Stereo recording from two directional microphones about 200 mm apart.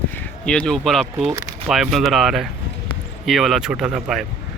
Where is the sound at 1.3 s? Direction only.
15° right (ahead or behind).